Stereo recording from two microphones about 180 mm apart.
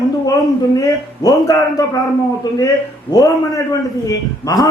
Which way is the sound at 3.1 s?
20° left (ahead or behind).